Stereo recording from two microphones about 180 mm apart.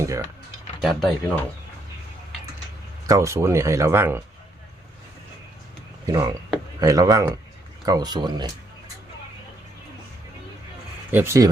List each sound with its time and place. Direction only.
0.8 s speech: centre (ahead or behind)
3.1 s speech: 15° right (ahead or behind)
6.1 s speech: 20° right (ahead or behind)
11.1 s speech: 15° right (ahead or behind)